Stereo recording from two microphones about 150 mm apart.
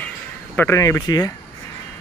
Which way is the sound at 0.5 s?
20° left (ahead or behind).